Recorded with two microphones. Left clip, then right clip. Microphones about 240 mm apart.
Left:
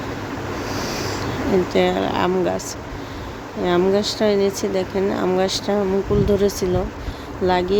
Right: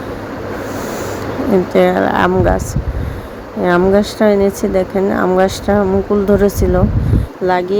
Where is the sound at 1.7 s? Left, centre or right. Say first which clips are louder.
Right 7 dB; centre.